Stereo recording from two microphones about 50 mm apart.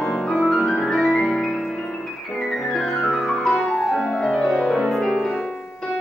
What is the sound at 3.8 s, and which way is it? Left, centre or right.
Music, centre.